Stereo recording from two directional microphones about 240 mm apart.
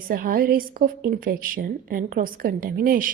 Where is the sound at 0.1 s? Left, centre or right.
Right.